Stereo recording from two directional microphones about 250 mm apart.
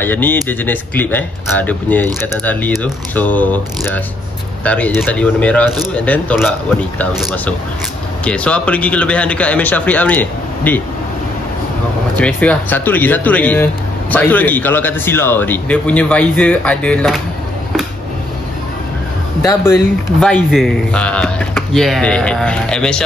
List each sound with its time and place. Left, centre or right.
0.0 s a man's voice: centre
12.2 s a man's voice: centre
20.2 s speech: centre